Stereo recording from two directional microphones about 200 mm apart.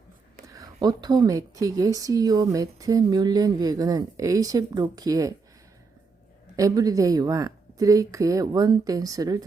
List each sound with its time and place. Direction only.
0.4 s speech: 15° right (ahead or behind)
6.6 s speech: 15° right (ahead or behind)